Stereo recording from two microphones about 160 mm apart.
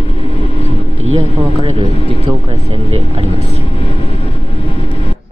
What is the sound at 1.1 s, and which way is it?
Speech, 40° right (ahead or behind).